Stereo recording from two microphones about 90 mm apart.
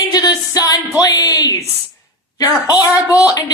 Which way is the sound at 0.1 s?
45° left (ahead or behind).